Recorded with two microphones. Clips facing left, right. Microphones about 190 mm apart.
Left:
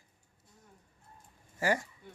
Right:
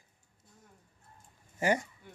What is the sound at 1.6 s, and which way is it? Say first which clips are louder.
Speech: right 2 dB; 20° right (ahead or behind).